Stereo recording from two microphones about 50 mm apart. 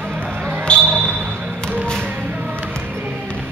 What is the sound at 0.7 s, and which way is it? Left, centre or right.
Basketball bounce, left.